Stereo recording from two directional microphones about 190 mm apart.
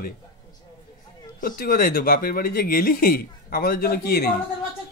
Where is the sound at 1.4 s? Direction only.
50° left (ahead or behind).